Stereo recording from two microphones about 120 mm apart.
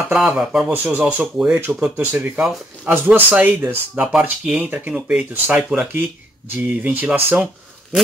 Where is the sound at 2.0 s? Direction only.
15° right (ahead or behind).